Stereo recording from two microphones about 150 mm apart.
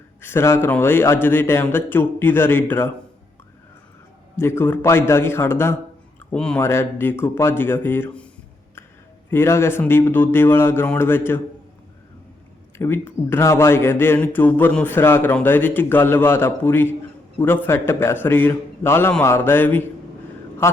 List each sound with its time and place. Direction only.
0.2 s speech: 15° left (ahead or behind)
4.4 s speech: 15° left (ahead or behind)
6.3 s speech: 5° left (ahead or behind)
6.6 s speech: 15° left (ahead or behind)
9.3 s speech: 15° left (ahead or behind)
12.7 s speech: 15° left (ahead or behind)